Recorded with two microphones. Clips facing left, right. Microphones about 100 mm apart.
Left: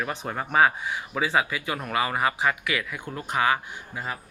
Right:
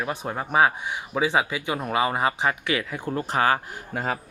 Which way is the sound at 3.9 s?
60° right (ahead or behind).